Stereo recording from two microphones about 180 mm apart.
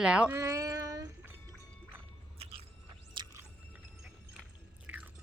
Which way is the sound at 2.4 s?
35° right (ahead or behind).